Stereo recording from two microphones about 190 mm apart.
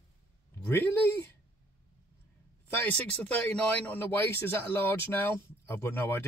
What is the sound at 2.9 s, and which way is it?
Speech, 5° left (ahead or behind).